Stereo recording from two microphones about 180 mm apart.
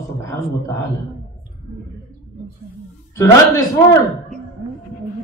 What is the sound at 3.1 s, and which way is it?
Speech, 15° left (ahead or behind).